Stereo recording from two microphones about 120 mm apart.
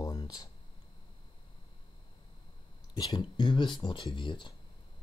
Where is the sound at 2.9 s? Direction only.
35° left (ahead or behind).